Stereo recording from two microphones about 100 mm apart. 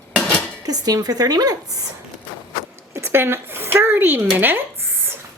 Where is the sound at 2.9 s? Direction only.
25° right (ahead or behind).